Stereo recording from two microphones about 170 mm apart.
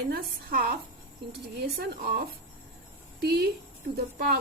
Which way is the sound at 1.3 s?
70° right (ahead or behind).